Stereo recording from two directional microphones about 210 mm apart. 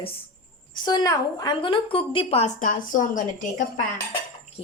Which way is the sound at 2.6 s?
40° left (ahead or behind).